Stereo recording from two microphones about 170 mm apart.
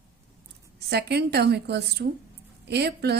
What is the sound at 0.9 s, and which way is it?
A woman's voice, 70° right (ahead or behind).